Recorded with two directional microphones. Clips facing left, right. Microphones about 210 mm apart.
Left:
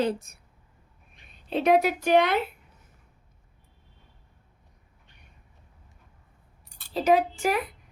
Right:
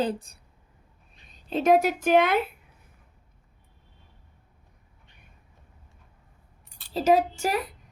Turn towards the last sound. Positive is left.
turn(degrees=-40)  # may be behind; listen again after turning